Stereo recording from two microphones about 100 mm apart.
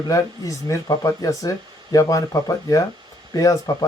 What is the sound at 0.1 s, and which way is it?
Speech, 35° left (ahead or behind).